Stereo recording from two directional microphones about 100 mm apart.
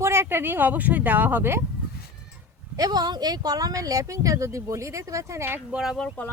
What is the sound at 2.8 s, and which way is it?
Speech, 45° right (ahead or behind).